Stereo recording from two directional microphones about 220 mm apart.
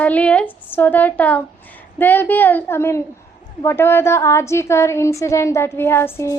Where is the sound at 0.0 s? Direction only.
5° left (ahead or behind).